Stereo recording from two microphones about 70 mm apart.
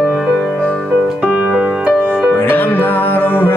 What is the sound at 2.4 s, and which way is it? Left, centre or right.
Music, left.